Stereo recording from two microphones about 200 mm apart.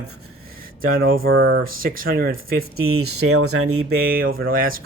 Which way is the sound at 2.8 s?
90° right.